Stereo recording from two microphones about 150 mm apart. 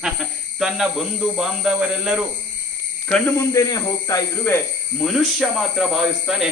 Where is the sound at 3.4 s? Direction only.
20° left (ahead or behind).